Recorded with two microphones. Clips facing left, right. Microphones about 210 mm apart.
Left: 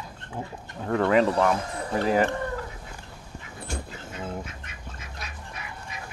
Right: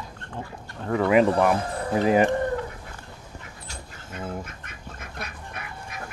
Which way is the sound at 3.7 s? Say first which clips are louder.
Left 9 dB; 50° left (ahead or behind).